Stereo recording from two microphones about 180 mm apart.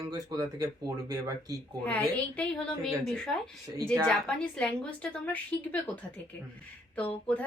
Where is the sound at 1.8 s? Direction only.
10° left (ahead or behind).